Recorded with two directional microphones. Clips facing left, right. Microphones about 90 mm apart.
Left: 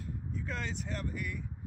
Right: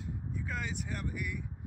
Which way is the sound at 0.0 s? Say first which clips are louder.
Even; 10° right (ahead or behind).